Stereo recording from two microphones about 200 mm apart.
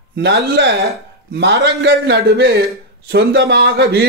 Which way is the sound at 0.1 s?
60° right (ahead or behind).